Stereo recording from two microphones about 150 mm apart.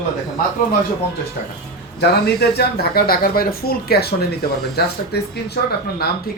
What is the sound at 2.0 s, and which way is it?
Speech, 90° left.